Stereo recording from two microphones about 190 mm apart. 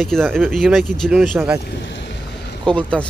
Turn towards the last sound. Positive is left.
turn(degrees=5)  # may be behind; listen again after turning